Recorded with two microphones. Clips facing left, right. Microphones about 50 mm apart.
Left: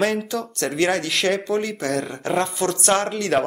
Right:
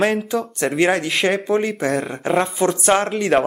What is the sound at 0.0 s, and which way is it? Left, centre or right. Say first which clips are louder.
Speech: right 3 dB; centre.